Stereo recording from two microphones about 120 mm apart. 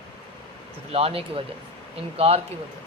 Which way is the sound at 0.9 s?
55° right (ahead or behind).